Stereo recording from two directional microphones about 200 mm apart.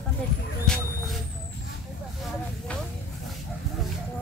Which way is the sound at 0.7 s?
5° left (ahead or behind).